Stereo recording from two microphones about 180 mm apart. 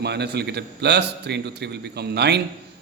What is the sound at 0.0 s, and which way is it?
A man's voice, 65° right (ahead or behind).